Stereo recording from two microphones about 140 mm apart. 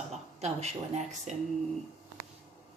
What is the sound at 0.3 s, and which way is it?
Speech, 50° right (ahead or behind).